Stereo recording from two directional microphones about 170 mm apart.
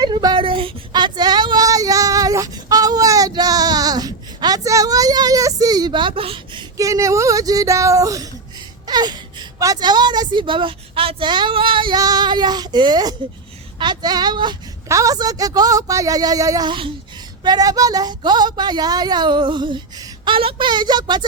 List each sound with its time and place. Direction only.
0.0 s child singing: 25° right (ahead or behind)
8.9 s a woman's voice: 25° right (ahead or behind)